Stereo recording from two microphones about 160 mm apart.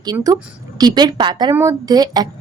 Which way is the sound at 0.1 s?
20° right (ahead or behind).